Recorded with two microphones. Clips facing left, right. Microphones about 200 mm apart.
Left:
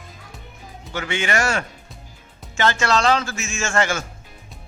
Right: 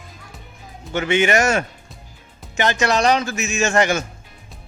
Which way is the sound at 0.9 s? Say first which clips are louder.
Right 6 dB; 20° right (ahead or behind).